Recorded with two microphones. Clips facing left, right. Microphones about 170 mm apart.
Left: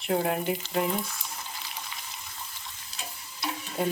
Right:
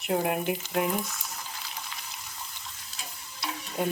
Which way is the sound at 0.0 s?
10° right (ahead or behind).